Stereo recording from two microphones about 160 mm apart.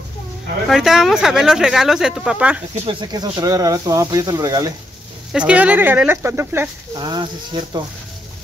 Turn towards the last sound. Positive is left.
turn(degrees=-30)  # may be behind; listen again after turning